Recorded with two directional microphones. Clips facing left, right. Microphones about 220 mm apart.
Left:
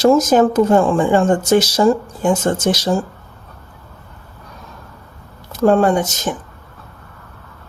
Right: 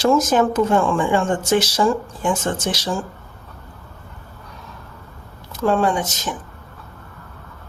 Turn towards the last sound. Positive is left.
turn(degrees=45)  # may be behind; listen again after turning